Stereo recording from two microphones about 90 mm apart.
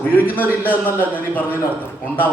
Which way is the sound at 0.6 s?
20° left (ahead or behind).